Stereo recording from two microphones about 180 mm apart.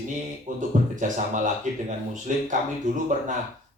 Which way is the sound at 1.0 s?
45° right (ahead or behind).